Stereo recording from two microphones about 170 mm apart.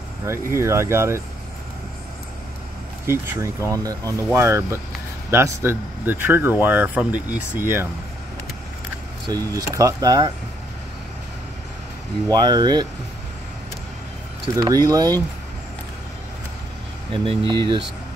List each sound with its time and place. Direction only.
0.6 s speech: 15° right (ahead or behind)
3.1 s speech: 15° right (ahead or behind)
9.3 s speech: 20° right (ahead or behind)
12.3 s speech: 25° right (ahead or behind)
14.5 s speech: 20° right (ahead or behind)
17.1 s speech: 30° right (ahead or behind)